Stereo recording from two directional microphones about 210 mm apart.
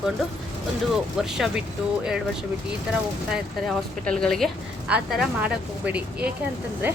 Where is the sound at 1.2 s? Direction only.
Centre (ahead or behind).